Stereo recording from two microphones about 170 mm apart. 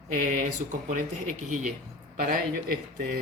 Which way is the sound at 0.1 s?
50° right (ahead or behind).